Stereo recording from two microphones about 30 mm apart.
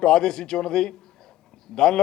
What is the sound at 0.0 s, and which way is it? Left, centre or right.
A man's voice, left.